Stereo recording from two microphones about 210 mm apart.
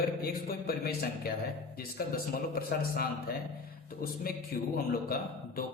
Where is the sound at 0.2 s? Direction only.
45° left (ahead or behind).